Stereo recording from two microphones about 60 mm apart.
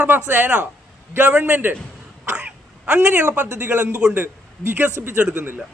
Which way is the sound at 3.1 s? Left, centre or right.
Right.